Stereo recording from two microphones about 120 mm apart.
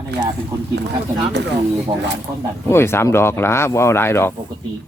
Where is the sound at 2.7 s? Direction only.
20° left (ahead or behind).